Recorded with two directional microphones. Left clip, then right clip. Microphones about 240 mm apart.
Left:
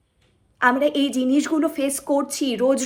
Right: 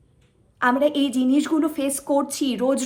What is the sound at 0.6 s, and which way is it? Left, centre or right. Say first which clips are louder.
A woman's voice: left 1 dB; centre.